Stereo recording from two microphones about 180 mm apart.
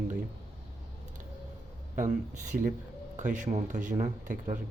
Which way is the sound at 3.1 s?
45° right (ahead or behind).